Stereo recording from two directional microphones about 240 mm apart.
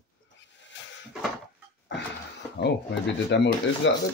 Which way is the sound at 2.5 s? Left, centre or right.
Left.